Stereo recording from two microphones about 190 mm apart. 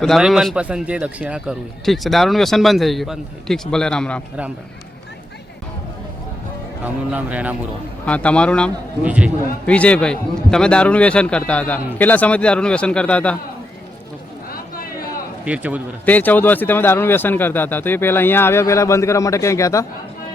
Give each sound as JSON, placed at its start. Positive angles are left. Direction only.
{"t": 0.0, "sound": "speech", "side_deg": 0}
{"t": 6.8, "sound": "speech", "side_deg": -5}
{"t": 8.0, "sound": "speech", "side_deg": 5}
{"t": 9.0, "sound": "speech", "side_deg": -5}
{"t": 9.6, "sound": "speech", "side_deg": 5}
{"t": 14.5, "sound": "a sound", "side_deg": 50}
{"t": 15.4, "sound": "speech", "side_deg": -5}
{"t": 16.0, "sound": "speech", "side_deg": 10}